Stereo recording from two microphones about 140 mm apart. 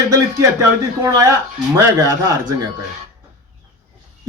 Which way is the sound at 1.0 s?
20° right (ahead or behind).